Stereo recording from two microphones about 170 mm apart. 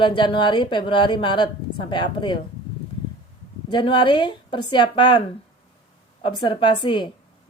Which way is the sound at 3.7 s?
30° left (ahead or behind).